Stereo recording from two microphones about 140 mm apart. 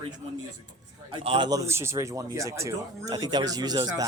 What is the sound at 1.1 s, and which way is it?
Speech, 40° right (ahead or behind).